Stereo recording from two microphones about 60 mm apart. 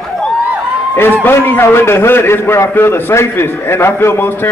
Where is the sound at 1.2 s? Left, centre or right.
Left.